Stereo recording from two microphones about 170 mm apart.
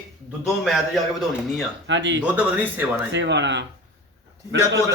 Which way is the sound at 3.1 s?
90° right.